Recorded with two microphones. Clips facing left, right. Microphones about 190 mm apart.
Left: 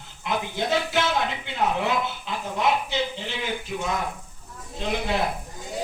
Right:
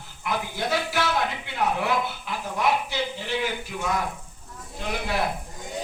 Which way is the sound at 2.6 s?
20° left (ahead or behind).